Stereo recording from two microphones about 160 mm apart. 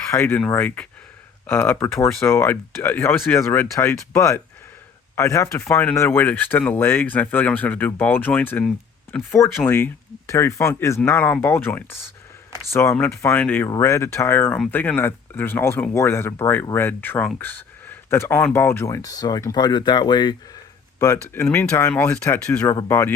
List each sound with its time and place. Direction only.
0.1 s speech: 15° left (ahead or behind)
22.6 s speech: 20° left (ahead or behind)